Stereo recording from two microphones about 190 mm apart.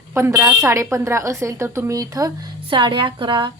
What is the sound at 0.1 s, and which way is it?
A woman's voice, 15° right (ahead or behind).